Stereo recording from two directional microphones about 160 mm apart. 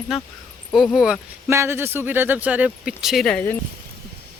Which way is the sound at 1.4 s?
15° right (ahead or behind).